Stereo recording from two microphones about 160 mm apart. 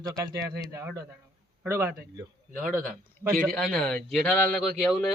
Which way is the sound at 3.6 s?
5° left (ahead or behind).